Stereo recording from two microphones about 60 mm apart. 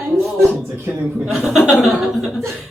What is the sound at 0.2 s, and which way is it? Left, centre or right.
Speech, centre.